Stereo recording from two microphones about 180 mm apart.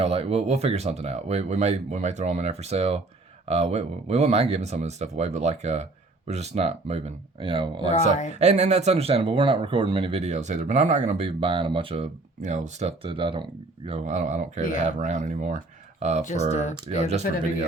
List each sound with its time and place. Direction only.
0.0 s speech: 35° right (ahead or behind)
8.3 s speech: 40° right (ahead or behind)
16.2 s speech: 40° left (ahead or behind)